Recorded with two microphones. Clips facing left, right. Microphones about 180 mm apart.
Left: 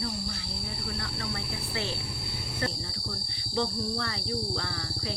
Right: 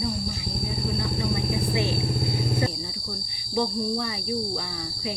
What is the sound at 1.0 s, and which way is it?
Speech, 15° right (ahead or behind).